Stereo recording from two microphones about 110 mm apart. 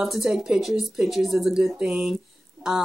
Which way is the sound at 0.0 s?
5° right (ahead or behind).